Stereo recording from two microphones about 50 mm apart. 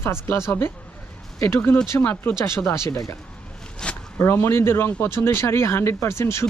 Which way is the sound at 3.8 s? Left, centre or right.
Centre.